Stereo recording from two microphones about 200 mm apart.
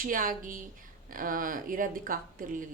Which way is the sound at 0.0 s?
45° right (ahead or behind).